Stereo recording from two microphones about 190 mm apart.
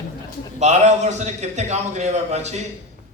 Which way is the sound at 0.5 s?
35° right (ahead or behind).